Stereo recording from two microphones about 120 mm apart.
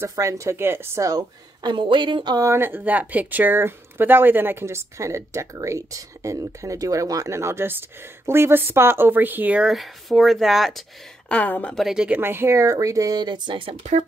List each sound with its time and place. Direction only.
0.1 s speech: 25° right (ahead or behind)
2.4 s a woman's voice: 20° right (ahead or behind); by 10.8 s centre (ahead or behind)
11.2 s speech: 15° left (ahead or behind)
11.7 s speech: 5° right (ahead or behind)
12.2 s speech: 20° right (ahead or behind); by 13.7 s 45° right (ahead or behind)